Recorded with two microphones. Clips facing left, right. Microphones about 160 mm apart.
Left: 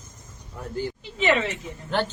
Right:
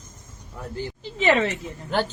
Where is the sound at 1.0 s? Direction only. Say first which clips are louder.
Right 3 dB; 35° right (ahead or behind).